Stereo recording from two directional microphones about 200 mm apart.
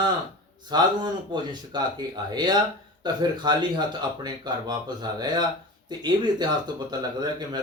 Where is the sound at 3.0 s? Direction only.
20° right (ahead or behind).